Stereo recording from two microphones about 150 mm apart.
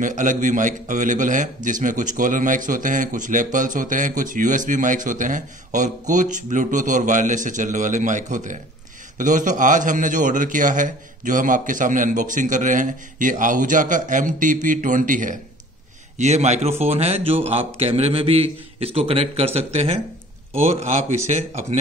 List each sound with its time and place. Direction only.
0.0 s a man's voice: 55° right (ahead or behind)
16.2 s a man's voice: 50° right (ahead or behind)